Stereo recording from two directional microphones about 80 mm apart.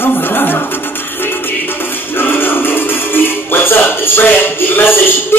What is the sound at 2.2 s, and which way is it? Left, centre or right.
Music, left.